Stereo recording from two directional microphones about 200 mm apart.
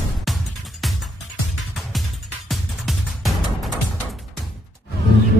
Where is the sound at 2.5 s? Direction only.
Centre (ahead or behind).